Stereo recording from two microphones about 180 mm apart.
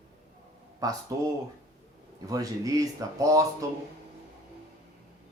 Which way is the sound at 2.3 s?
20° right (ahead or behind).